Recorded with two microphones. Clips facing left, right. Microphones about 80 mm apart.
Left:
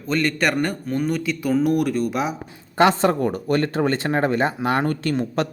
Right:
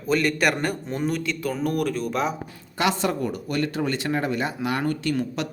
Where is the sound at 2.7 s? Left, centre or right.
Left.